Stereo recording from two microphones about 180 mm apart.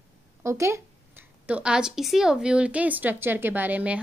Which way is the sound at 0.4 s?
15° right (ahead or behind).